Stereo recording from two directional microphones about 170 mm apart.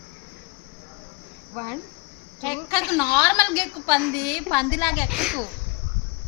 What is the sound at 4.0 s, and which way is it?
Speech, centre (ahead or behind).